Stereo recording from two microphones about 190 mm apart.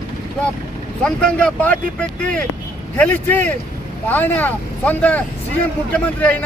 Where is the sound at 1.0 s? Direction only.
5° left (ahead or behind).